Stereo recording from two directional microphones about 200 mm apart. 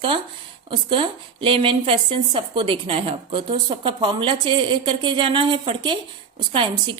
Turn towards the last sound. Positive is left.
turn(degrees=-25)  # may be behind; listen again after turning